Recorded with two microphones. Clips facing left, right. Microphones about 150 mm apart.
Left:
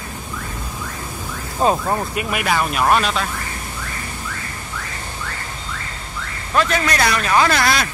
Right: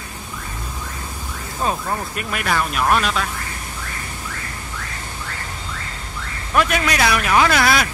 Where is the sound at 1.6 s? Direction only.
30° left (ahead or behind).